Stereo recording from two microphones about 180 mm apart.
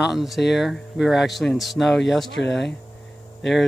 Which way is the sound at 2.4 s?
75° left (ahead or behind).